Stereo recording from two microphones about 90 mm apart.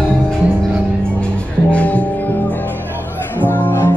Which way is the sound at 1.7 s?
15° left (ahead or behind).